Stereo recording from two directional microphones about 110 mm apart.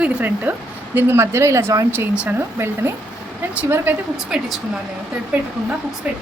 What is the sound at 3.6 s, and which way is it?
Speech, 20° right (ahead or behind).